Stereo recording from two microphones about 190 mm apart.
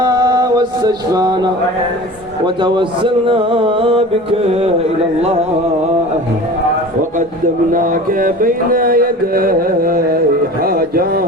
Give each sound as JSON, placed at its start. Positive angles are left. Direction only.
{"t": 0.0, "sound": "music", "side_deg": -20}
{"t": 2.6, "sound": "music", "side_deg": -25}
{"t": 7.7, "sound": "mantra", "side_deg": -45}